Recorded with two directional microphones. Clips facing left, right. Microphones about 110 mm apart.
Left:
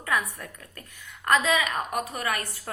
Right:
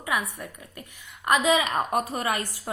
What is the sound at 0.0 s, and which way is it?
A woman's voice, 15° right (ahead or behind).